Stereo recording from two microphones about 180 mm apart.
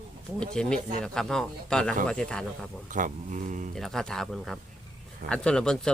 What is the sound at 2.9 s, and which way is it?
Speech, 45° right (ahead or behind).